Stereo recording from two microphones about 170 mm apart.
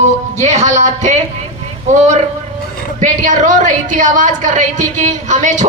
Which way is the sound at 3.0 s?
50° right (ahead or behind).